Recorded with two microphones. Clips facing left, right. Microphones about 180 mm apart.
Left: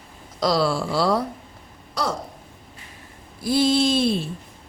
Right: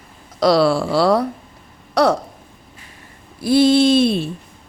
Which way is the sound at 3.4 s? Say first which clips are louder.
Right 6 dB; 65° right (ahead or behind).